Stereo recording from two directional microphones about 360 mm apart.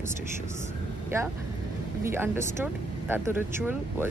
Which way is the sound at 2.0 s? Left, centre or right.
Centre.